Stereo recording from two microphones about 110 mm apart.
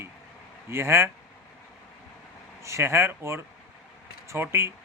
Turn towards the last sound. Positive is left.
turn(degrees=-25)  # may be behind; listen again after turning